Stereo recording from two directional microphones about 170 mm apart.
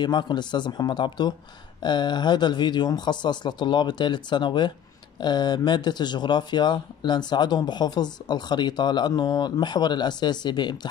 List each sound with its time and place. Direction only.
0.0 s speech: 25° left (ahead or behind)